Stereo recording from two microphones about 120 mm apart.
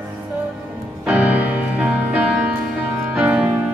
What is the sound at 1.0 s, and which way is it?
Music, 10° right (ahead or behind).